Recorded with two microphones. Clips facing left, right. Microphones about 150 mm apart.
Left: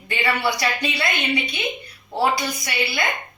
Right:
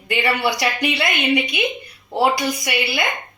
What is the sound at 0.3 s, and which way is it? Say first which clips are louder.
Speech: right 1 dB; 15° right (ahead or behind).